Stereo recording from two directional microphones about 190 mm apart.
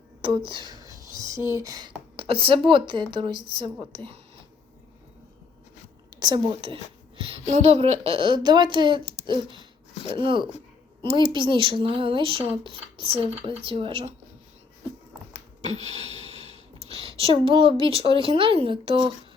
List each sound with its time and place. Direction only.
0.2 s a woman's voice: 25° right (ahead or behind)
6.1 s a woman's voice: 20° right (ahead or behind)
15.6 s a sound: 35° right (ahead or behind)
16.9 s a woman's voice: 30° right (ahead or behind)